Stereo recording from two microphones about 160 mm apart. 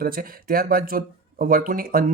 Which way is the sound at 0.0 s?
70° right (ahead or behind).